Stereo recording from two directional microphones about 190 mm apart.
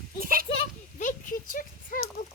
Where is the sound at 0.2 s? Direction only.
50° right (ahead or behind).